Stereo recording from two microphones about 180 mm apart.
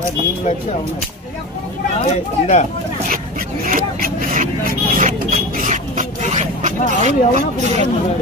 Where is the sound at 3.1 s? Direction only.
50° right (ahead or behind).